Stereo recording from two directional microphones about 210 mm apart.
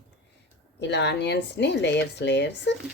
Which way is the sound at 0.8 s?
55° left (ahead or behind).